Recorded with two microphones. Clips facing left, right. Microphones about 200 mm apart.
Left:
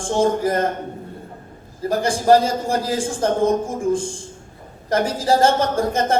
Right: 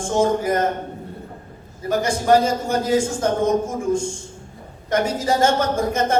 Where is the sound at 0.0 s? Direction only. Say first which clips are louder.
Left 1 dB; 30° left (ahead or behind).